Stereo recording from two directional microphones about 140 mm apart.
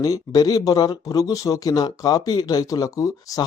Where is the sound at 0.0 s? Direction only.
25° left (ahead or behind).